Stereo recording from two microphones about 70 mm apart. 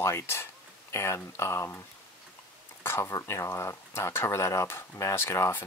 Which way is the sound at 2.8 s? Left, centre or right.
Left.